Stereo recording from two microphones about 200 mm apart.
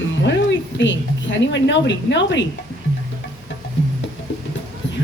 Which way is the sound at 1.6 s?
60° left (ahead or behind).